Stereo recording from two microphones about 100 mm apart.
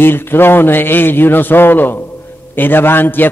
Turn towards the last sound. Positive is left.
turn(degrees=20)  # may be behind; listen again after turning